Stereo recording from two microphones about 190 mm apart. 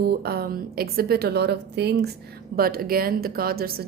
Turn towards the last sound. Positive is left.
turn(degrees=-50)  # may be behind; listen again after turning